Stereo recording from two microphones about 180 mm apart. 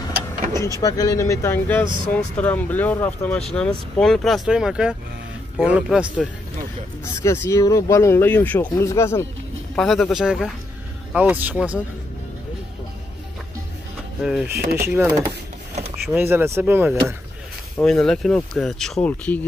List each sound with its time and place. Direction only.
0.7 s speech: 20° left (ahead or behind); by 6.2 s 5° right (ahead or behind)
7.2 s speech: 15° left (ahead or behind)
9.8 s speech: centre (ahead or behind)
14.2 s speech: 5° right (ahead or behind)
14.5 s speech: 55° right (ahead or behind)
15.0 s speech: 20° right (ahead or behind)
17.7 s speech: 5° left (ahead or behind)